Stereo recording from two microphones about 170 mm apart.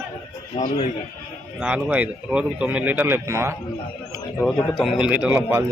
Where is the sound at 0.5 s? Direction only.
40° left (ahead or behind).